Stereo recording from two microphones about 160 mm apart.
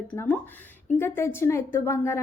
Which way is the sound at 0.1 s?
10° left (ahead or behind).